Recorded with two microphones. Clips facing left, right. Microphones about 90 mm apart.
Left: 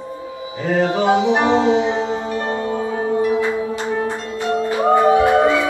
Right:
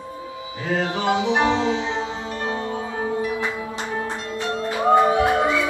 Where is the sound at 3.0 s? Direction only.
25° left (ahead or behind).